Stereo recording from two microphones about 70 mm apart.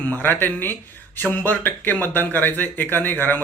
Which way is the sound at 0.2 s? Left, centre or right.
Left.